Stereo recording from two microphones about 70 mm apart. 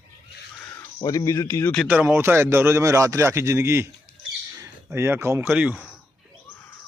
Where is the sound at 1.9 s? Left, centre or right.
Right.